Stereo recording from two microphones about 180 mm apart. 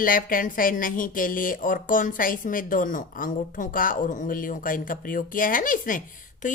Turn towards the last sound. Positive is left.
turn(degrees=50)  # may be behind; listen again after turning